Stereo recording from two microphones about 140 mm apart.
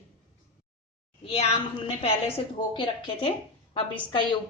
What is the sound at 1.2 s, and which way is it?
A woman's voice, 45° left (ahead or behind).